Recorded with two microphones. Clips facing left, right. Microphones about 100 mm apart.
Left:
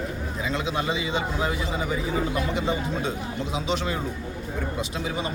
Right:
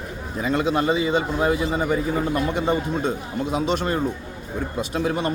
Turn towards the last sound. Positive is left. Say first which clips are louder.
# right 6 dB
turn(degrees=-55)  # may be behind; listen again after turning